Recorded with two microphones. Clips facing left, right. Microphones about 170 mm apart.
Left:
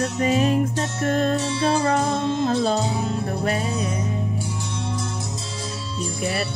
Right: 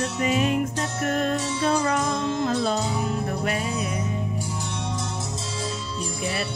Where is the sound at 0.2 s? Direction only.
35° left (ahead or behind).